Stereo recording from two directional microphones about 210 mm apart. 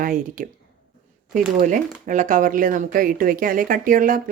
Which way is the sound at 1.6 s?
40° right (ahead or behind).